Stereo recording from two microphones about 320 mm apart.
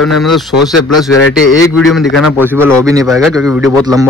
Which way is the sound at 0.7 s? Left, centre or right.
Left.